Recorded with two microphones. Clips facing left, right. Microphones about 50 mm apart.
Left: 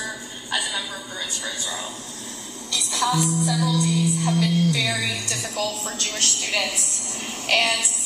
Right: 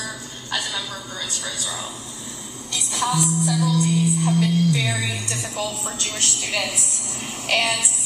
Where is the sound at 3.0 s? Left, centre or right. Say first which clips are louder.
Even; right.